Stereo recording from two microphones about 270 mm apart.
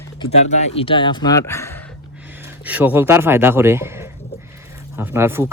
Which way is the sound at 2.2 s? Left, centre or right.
Centre.